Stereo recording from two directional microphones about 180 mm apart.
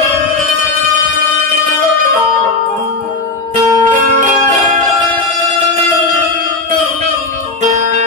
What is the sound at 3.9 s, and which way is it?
Music, 45° right (ahead or behind).